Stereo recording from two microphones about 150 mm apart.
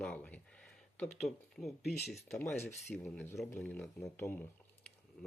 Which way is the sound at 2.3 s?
15° left (ahead or behind).